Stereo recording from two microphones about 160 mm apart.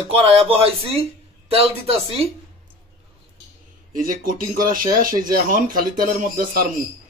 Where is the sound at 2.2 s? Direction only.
40° right (ahead or behind).